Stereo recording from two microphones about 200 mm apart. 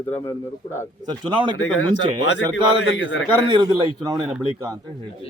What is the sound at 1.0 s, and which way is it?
Speech, 20° right (ahead or behind).